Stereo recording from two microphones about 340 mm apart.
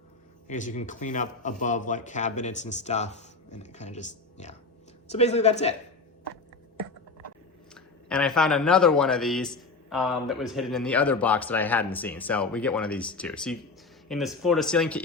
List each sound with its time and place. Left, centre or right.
0.4 s a man's voice: left
7.7 s speech: centre